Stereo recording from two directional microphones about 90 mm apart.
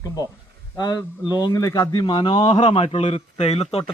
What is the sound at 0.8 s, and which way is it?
A man's voice, 50° left (ahead or behind).